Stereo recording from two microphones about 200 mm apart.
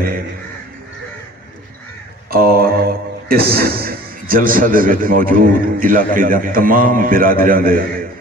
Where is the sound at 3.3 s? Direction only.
50° right (ahead or behind).